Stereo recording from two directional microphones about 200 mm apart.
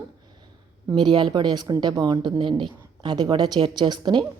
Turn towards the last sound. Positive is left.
turn(degrees=-20)  # may be behind; listen again after turning